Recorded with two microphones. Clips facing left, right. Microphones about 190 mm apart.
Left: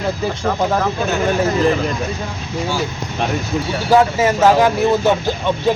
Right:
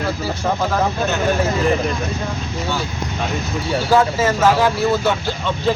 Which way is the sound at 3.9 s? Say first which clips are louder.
Left 3 dB; 15° left (ahead or behind).